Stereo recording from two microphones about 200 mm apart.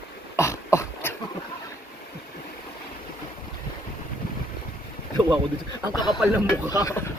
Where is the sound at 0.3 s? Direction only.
15° left (ahead or behind).